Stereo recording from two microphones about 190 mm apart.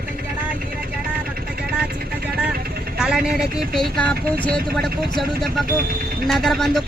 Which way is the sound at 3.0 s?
5° right (ahead or behind).